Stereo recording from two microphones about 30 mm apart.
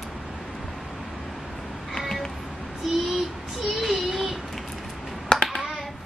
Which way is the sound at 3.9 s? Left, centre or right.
Centre.